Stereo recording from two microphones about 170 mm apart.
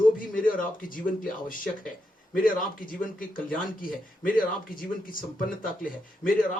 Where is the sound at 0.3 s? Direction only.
55° left (ahead or behind).